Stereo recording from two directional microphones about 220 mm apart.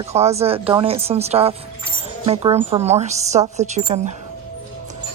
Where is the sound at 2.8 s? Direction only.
30° right (ahead or behind).